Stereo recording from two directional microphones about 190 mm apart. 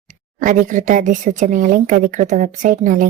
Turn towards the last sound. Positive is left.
turn(degrees=-45)  # may be behind; listen again after turning